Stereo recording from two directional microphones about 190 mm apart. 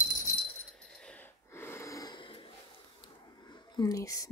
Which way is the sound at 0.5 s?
5° left (ahead or behind).